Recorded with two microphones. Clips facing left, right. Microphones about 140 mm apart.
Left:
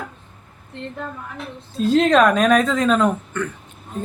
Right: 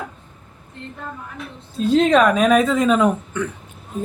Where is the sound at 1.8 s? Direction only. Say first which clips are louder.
Even; centre (ahead or behind).